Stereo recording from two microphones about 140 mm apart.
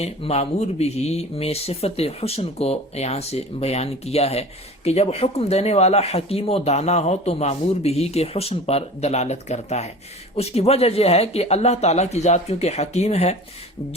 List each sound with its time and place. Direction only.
0.0 s speech: 50° left (ahead or behind)